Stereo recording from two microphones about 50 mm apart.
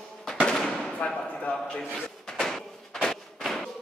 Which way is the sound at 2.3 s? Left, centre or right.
Centre.